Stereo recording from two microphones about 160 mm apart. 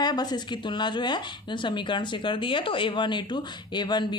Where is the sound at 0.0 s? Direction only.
25° left (ahead or behind).